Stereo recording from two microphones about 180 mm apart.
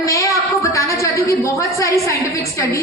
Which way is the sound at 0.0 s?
15° left (ahead or behind).